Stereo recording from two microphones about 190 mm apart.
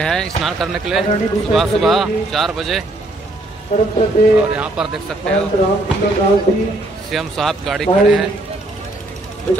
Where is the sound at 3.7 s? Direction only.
40° left (ahead or behind).